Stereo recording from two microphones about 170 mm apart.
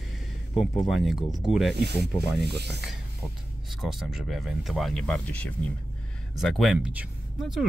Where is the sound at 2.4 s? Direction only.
80° right.